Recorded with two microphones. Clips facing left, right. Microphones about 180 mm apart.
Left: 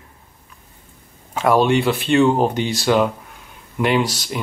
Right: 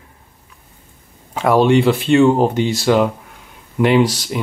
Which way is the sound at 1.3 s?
10° right (ahead or behind).